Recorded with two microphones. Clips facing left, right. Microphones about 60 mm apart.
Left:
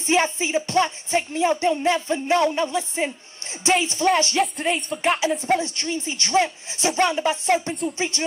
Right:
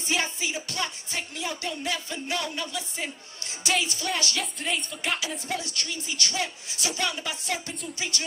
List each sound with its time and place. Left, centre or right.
0.0 s music: left
4.4 s a sound: left
5.6 s music: left